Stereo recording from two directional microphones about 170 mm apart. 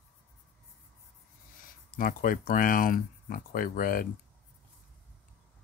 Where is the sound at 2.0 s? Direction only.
55° left (ahead or behind).